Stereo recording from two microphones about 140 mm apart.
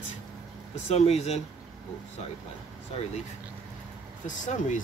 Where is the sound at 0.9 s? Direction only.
50° left (ahead or behind).